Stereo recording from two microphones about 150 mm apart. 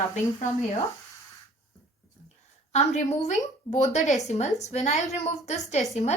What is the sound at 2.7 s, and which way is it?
A woman's voice, 50° left (ahead or behind).